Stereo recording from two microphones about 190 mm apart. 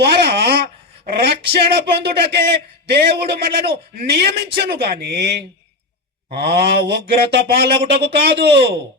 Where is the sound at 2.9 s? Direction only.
60° right (ahead or behind).